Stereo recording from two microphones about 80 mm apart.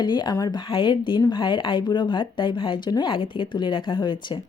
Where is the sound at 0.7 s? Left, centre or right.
Left.